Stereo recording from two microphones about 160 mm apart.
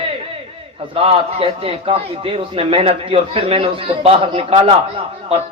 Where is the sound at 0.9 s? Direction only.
35° right (ahead or behind).